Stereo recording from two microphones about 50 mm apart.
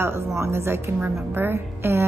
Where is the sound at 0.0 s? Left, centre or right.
Right.